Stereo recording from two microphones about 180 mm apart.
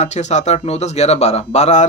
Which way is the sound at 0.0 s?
40° left (ahead or behind).